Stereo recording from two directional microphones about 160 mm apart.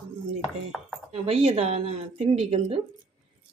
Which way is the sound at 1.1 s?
35° right (ahead or behind).